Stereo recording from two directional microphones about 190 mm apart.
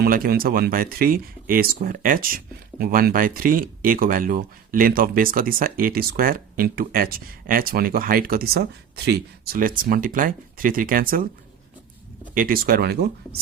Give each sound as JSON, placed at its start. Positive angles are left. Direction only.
{"t": 0.0, "sound": "speech", "side_deg": -50}
{"t": 12.3, "sound": "speech", "side_deg": -45}